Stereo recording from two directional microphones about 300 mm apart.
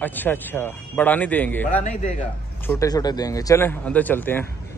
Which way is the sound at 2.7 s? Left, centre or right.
Centre.